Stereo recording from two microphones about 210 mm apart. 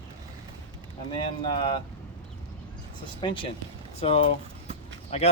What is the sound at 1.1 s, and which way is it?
Speech, 20° left (ahead or behind).